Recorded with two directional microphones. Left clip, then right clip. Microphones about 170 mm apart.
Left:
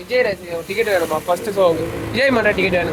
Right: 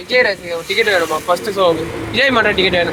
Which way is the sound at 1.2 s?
25° left (ahead or behind).